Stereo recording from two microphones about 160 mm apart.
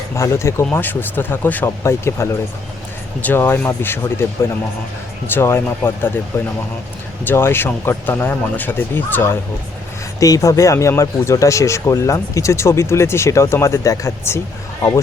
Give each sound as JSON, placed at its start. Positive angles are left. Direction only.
{"t": 0.2, "sound": "speech", "side_deg": 20}
{"t": 5.3, "sound": "speech", "side_deg": 15}
{"t": 7.3, "sound": "speech", "side_deg": 15}